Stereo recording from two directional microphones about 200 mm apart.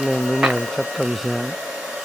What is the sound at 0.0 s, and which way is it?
Hair dryer, centre (ahead or behind).